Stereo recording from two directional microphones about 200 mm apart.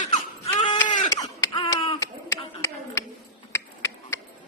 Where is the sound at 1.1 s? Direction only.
20° left (ahead or behind).